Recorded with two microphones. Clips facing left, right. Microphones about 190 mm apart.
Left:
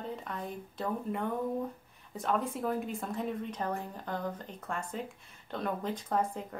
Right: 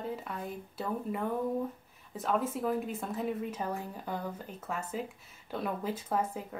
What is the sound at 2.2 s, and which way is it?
Speech, centre (ahead or behind).